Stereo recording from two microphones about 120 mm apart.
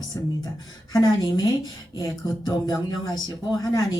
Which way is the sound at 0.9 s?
35° left (ahead or behind).